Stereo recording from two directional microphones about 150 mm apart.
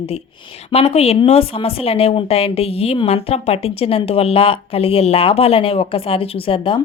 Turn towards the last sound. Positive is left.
turn(degrees=35)  # may be behind; listen again after turning